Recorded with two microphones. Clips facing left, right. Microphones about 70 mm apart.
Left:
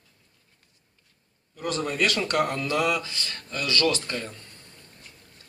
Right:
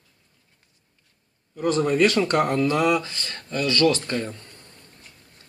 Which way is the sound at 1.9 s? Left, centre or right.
Centre.